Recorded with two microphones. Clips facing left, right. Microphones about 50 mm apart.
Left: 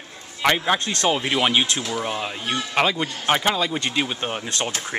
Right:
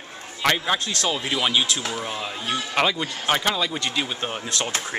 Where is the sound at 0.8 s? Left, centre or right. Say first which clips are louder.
Left 4 dB; left.